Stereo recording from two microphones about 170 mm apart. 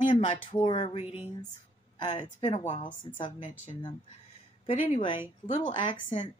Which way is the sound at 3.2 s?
30° left (ahead or behind).